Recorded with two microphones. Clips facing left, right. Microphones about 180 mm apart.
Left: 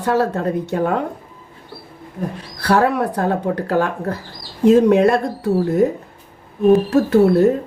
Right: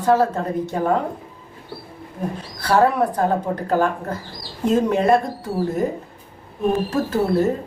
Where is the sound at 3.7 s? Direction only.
70° left (ahead or behind).